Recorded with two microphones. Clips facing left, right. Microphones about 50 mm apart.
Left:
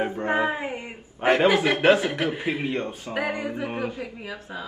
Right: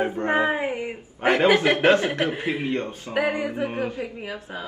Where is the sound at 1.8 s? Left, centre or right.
Centre.